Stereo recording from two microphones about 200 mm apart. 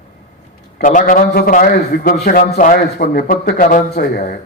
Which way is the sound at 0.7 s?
40° left (ahead or behind).